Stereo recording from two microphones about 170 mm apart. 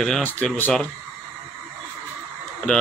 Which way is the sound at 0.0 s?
5° left (ahead or behind).